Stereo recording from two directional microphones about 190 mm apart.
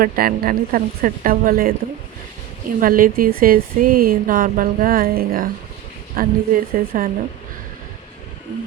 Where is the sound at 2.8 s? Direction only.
45° right (ahead or behind).